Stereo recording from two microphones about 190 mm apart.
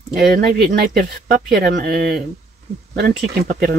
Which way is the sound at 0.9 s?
55° right (ahead or behind).